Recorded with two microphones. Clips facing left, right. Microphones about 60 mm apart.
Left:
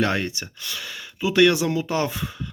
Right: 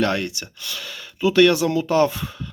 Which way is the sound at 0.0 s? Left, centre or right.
Left.